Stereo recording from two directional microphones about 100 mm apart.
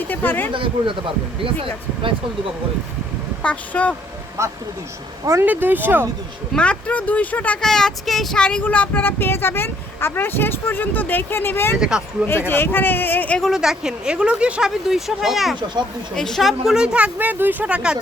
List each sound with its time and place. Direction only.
0.1 s speech: 20° left (ahead or behind)
0.5 s speech: 60° right (ahead or behind)
3.4 s speech: 15° left (ahead or behind)
4.4 s speech: 30° right (ahead or behind)
5.5 s speech: 20° right (ahead or behind)
6.5 s speech: 10° left (ahead or behind)
11.8 s speech: 5° right (ahead or behind)
12.5 s speech: 20° left (ahead or behind)
13.4 s speech: 5° right (ahead or behind)